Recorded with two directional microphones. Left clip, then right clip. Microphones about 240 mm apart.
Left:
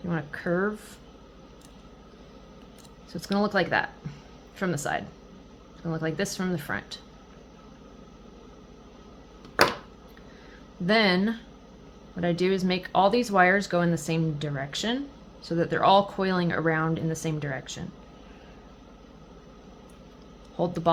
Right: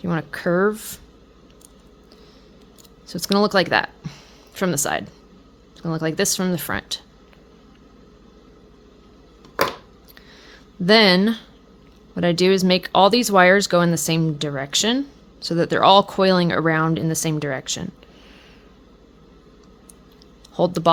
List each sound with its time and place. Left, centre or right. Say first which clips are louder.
0.0 s speech: right 8 dB; right
3.1 s speech: right 8 dB; right
10.8 s speech: right 8 dB; right
20.6 s speech: right 8 dB; right